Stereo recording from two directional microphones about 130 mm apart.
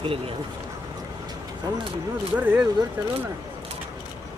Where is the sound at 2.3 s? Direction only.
10° right (ahead or behind).